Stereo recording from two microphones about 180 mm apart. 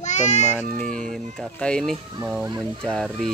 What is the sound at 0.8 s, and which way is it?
Speech, 5° left (ahead or behind).